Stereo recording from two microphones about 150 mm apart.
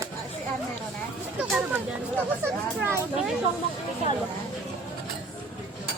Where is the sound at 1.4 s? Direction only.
5° right (ahead or behind).